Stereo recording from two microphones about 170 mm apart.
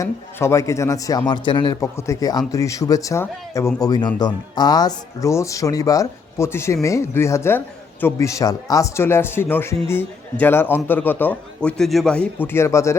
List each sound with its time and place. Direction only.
0.0 s a man's voice: 15° left (ahead or behind)
1.8 s a man's voice: 15° left (ahead or behind)